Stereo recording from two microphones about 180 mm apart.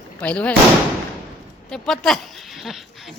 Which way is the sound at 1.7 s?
Centre (ahead or behind).